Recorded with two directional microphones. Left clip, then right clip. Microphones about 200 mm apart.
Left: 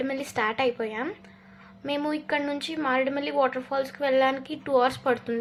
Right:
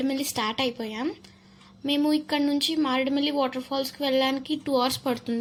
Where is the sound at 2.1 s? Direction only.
55° right (ahead or behind).